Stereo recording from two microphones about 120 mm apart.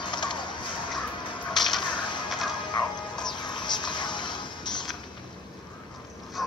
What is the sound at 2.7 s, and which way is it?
Music, 40° left (ahead or behind).